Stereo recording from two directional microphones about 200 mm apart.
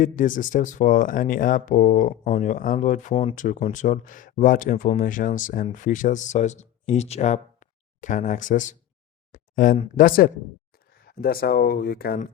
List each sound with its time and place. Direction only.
0.0 s speech: 40° left (ahead or behind)
9.3 s a sound: 40° left (ahead or behind)
10.0 s speech: 45° left (ahead or behind)